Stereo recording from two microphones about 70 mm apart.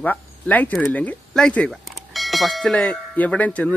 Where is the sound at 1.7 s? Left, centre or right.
Centre.